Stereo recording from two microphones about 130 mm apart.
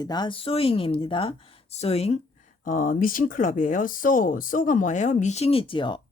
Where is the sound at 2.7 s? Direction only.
90° left; by 6.0 s 40° left (ahead or behind).